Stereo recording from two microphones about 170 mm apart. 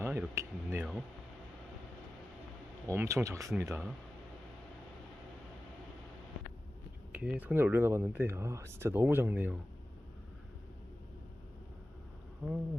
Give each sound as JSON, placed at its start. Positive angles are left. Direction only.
{"t": 0.0, "sound": "speech", "side_deg": -15}
{"t": 2.8, "sound": "speech", "side_deg": -15}
{"t": 7.1, "sound": "speech", "side_deg": -10}
{"t": 12.4, "sound": "speech", "side_deg": -10}